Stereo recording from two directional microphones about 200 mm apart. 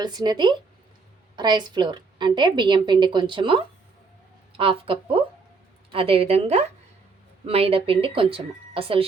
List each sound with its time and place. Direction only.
0.0 s a woman's voice: 20° right (ahead or behind)